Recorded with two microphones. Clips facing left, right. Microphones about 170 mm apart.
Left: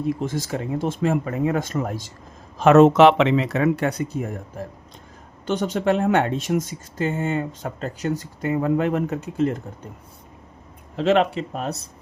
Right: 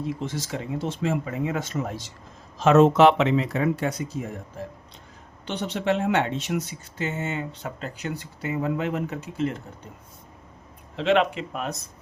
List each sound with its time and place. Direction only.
0.2 s speech: 50° left (ahead or behind)
2.6 s speech: 65° left (ahead or behind)
5.5 s speech: 45° left (ahead or behind)
10.9 s speech: 40° left (ahead or behind)